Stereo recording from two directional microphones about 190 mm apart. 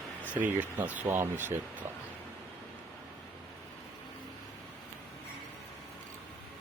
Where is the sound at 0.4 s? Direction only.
10° right (ahead or behind).